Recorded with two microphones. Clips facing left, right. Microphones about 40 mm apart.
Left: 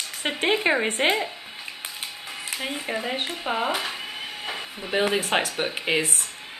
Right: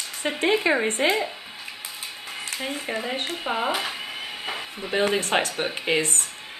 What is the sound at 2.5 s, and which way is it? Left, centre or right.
Speech, centre.